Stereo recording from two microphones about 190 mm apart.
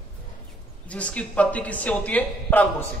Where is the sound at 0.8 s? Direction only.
5° left (ahead or behind).